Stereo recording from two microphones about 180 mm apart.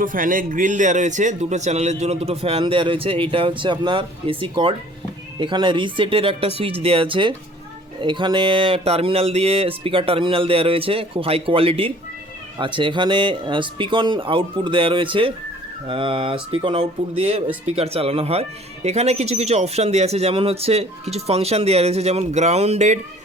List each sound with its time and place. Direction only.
0.0 s speech: 50° right (ahead or behind)